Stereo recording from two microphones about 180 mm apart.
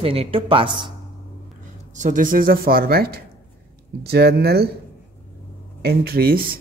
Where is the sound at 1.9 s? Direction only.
45° right (ahead or behind); by 4.7 s 60° right (ahead or behind).